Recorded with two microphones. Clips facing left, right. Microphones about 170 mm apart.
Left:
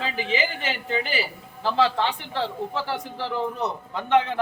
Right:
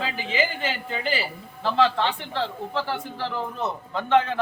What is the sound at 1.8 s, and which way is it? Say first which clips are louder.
Speech: right 1 dB; 15° left (ahead or behind).